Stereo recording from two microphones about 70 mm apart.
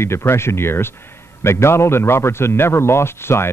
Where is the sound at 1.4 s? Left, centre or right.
Left.